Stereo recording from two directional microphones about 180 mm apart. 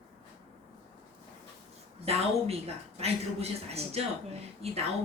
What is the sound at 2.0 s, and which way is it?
A woman's voice, 35° right (ahead or behind).